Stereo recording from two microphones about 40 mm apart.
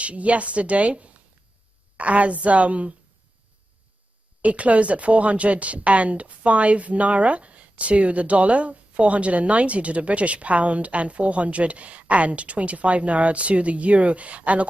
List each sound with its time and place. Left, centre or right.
0.0 s speech: right
4.4 s speech: right